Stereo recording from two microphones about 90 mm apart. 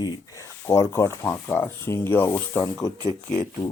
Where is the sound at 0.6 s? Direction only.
30° left (ahead or behind).